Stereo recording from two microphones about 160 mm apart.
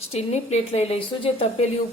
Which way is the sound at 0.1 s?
40° left (ahead or behind).